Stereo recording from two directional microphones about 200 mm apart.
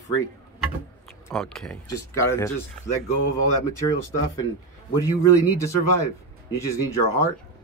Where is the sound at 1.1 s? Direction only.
5° left (ahead or behind).